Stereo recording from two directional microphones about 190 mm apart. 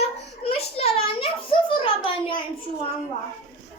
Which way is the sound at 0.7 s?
30° left (ahead or behind).